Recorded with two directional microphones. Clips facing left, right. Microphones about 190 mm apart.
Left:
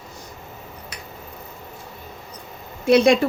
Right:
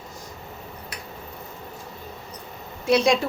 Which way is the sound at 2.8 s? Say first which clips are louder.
Left 5 dB; 60° left (ahead or behind).